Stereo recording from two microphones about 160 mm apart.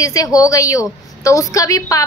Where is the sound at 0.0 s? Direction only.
20° left (ahead or behind).